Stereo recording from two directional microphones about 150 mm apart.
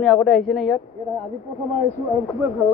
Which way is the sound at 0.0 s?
Centre (ahead or behind).